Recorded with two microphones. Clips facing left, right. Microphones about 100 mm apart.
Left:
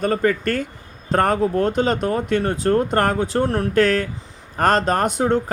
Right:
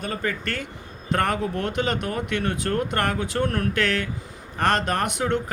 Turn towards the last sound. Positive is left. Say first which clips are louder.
# left 5 dB
turn(degrees=35)  # may be behind; listen again after turning